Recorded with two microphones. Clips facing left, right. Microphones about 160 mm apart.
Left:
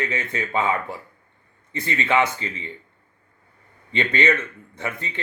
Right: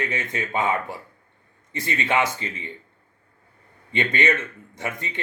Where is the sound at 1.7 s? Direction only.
20° right (ahead or behind).